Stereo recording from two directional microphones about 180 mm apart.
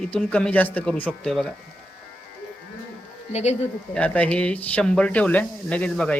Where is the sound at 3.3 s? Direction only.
40° left (ahead or behind).